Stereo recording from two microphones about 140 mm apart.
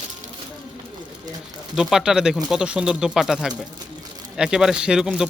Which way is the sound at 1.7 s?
5° right (ahead or behind).